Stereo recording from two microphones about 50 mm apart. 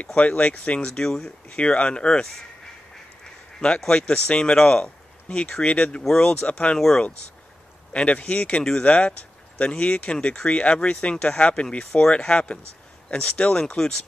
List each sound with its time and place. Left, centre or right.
0.0 s speech: left
3.9 s speech: left
7.9 s speech: left